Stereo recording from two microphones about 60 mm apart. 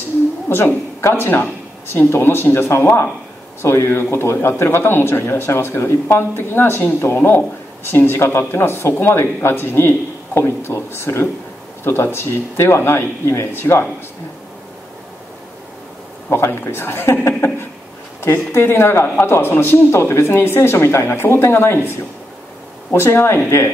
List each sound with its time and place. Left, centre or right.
0.5 s speech: left
16.3 s speech: left
19.9 s speech: left
22.9 s speech: left